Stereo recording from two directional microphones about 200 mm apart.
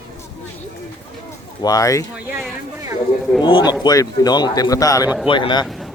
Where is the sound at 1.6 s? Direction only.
15° left (ahead or behind).